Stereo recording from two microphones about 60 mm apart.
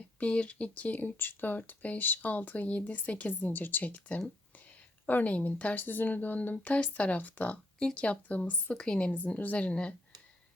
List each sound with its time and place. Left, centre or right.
0.2 s speech: centre
8.7 s a woman's voice: centre
9.1 s speech: left